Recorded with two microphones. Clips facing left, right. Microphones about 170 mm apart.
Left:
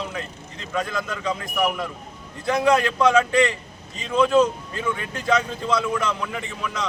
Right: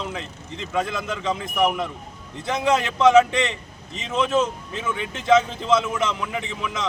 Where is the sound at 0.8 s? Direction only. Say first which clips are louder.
Right 1 dB; 20° right (ahead or behind).